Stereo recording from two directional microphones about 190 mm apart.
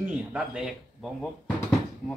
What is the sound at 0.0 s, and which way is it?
Speech, 5° right (ahead or behind).